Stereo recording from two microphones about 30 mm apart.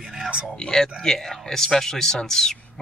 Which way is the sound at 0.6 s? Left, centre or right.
Left.